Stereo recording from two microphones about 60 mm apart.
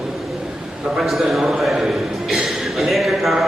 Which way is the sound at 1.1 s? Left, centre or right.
Centre.